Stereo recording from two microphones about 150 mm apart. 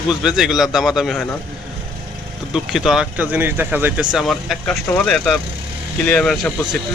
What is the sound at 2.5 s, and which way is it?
Speech, 5° right (ahead or behind).